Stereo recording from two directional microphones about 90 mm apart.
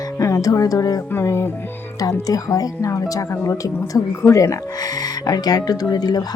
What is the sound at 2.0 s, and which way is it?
Speech, 40° left (ahead or behind).